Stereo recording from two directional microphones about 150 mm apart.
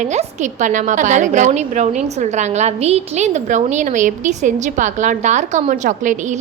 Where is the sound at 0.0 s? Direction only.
50° right (ahead or behind).